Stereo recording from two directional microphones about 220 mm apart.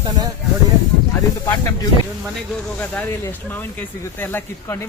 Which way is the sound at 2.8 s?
10° left (ahead or behind).